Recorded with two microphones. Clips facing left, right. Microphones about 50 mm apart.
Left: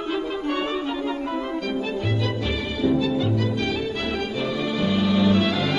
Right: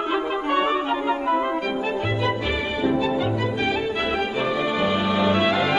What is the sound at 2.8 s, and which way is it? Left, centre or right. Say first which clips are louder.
Music: left 1 dB; right.